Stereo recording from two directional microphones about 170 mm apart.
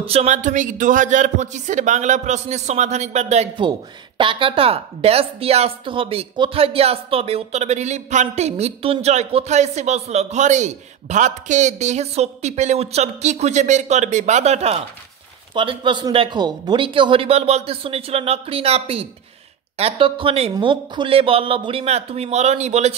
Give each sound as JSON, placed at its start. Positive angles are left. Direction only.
{"t": 0.0, "sound": "speech", "side_deg": -35}
{"t": 4.2, "sound": "a woman's voice", "side_deg": -30}